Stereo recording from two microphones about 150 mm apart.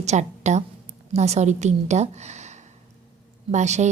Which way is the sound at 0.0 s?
50° right (ahead or behind).